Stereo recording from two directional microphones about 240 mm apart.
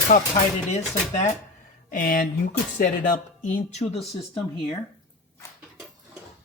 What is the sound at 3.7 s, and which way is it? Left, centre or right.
Speech, left.